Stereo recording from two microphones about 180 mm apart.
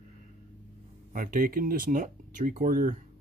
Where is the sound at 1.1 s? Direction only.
50° right (ahead or behind).